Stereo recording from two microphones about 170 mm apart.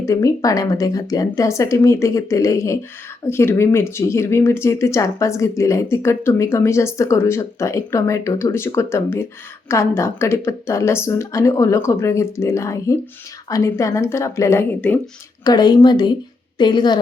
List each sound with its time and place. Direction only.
0.0 s speech: 20° left (ahead or behind)
15.4 s speech: 25° left (ahead or behind)